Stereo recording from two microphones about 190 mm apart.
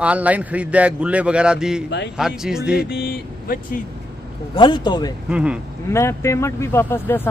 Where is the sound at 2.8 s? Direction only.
55° left (ahead or behind).